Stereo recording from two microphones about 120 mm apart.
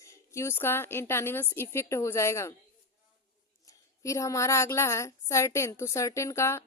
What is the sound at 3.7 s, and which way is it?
A woman's voice, 25° left (ahead or behind).